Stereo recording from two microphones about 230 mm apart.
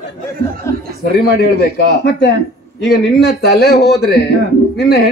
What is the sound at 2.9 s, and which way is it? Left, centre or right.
A man's voice, left.